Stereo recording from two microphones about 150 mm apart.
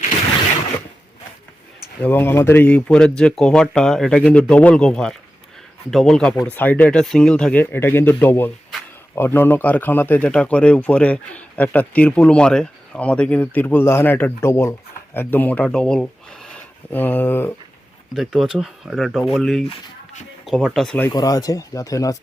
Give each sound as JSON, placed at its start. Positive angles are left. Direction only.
{"t": 2.0, "sound": "a man's voice", "side_deg": 15}
{"t": 18.1, "sound": "speech", "side_deg": 0}
{"t": 21.1, "sound": "speech", "side_deg": 25}